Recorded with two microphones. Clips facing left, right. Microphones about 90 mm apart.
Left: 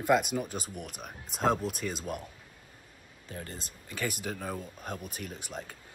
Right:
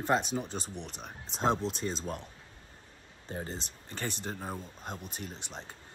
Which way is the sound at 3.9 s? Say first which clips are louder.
Left 3 dB; 35° right (ahead or behind).